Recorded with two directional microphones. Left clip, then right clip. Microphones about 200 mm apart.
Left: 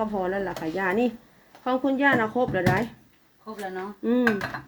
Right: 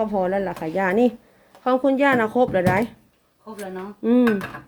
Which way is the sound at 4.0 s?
30° right (ahead or behind).